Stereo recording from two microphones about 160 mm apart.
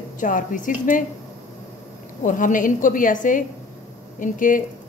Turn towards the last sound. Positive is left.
turn(degrees=55)  # may be behind; listen again after turning